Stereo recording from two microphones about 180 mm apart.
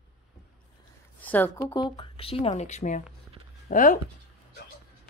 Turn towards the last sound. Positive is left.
turn(degrees=45)  # may be behind; listen again after turning